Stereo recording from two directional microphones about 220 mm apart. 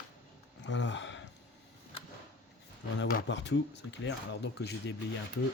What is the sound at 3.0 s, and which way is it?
Speech, 55° left (ahead or behind).